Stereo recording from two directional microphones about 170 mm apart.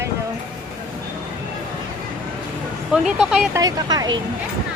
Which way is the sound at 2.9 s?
5° right (ahead or behind).